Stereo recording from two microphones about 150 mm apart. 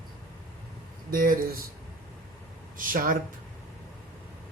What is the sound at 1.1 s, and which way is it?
Speech, 65° right (ahead or behind).